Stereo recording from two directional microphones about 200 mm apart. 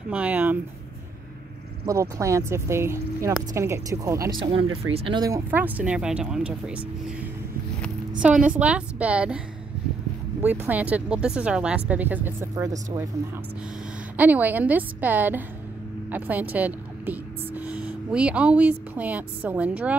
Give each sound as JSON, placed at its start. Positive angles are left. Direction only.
{"t": 0.1, "sound": "speech", "side_deg": -10}
{"t": 1.9, "sound": "speech", "side_deg": -15}
{"t": 4.4, "sound": "speech", "side_deg": -25}
{"t": 8.2, "sound": "a woman's voice", "side_deg": -5}
{"t": 10.4, "sound": "speech", "side_deg": -10}
{"t": 14.1, "sound": "speech", "side_deg": -10}